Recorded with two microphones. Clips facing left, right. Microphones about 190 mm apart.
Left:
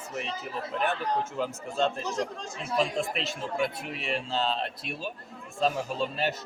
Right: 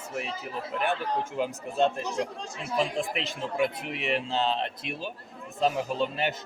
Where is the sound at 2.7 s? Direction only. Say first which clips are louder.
Even; 15° right (ahead or behind).